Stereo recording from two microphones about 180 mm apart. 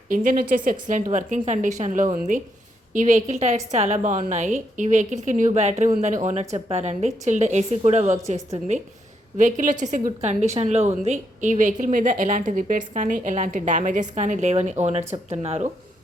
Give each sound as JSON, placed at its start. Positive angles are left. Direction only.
{"t": 0.1, "sound": "a woman's voice", "side_deg": -45}